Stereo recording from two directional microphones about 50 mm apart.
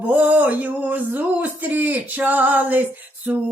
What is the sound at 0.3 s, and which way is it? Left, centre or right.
Music, right.